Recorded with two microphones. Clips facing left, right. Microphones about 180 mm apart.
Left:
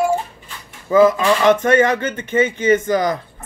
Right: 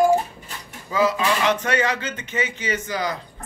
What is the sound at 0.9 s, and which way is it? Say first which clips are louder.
Speech: left 8 dB; 50° left (ahead or behind).